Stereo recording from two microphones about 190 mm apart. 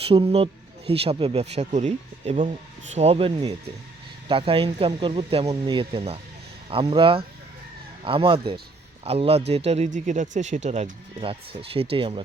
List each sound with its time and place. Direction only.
0.0 s speech: 30° right (ahead or behind)